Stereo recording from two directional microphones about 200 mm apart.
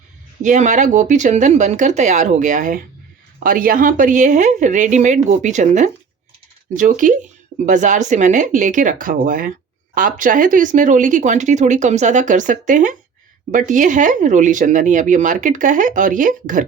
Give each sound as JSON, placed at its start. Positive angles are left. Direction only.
{"t": 0.4, "sound": "speech", "side_deg": -40}